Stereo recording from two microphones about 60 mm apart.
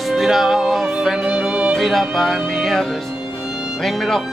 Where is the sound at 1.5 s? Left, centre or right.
Right.